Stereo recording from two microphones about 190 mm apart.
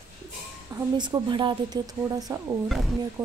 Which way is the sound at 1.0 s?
25° right (ahead or behind).